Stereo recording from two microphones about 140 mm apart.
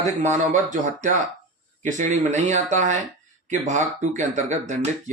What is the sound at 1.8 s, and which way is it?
Speech, 60° right (ahead or behind).